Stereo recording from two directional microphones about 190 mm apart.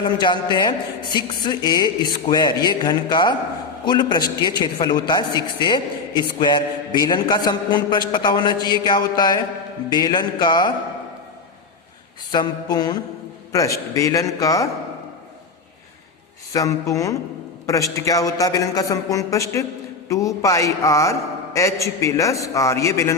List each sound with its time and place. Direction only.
0.0 s a man's voice: 25° left (ahead or behind)
12.3 s a man's voice: 20° left (ahead or behind)
16.5 s a man's voice: 15° left (ahead or behind)